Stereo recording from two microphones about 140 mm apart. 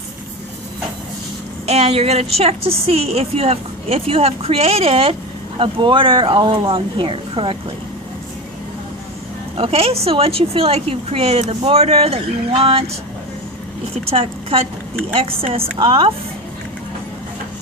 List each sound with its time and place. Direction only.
1.6 s a woman's voice: 45° right (ahead or behind)
9.6 s a woman's voice: 45° right (ahead or behind)
13.9 s a woman's voice: 45° right (ahead or behind)